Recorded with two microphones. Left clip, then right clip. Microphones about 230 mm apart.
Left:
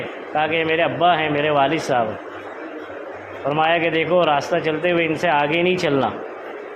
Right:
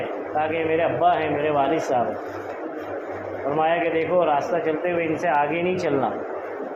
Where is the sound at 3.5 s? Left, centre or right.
Left.